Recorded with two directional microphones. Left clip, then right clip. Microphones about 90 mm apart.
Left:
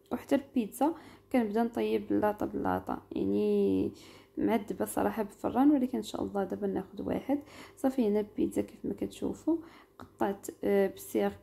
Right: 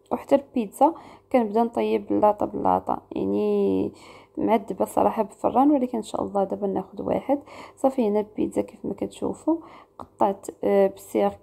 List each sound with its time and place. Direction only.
0.1 s a woman's voice: 40° right (ahead or behind)